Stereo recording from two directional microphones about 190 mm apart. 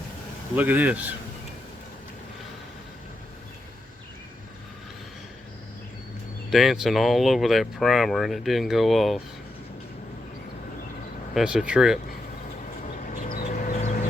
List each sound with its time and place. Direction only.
0.5 s speech: 10° right (ahead or behind)
6.5 s speech: centre (ahead or behind)
11.3 s speech: 5° right (ahead or behind)
13.1 s vehicle: 45° left (ahead or behind)